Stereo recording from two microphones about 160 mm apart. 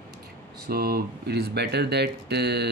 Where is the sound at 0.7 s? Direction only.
70° right (ahead or behind).